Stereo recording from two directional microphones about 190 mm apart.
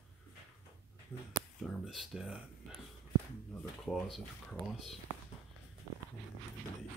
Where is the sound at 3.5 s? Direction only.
Centre (ahead or behind).